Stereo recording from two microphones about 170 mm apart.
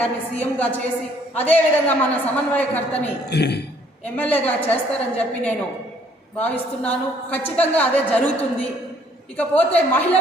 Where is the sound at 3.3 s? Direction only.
75° left (ahead or behind).